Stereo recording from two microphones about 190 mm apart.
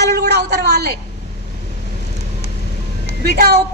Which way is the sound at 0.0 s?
60° right (ahead or behind).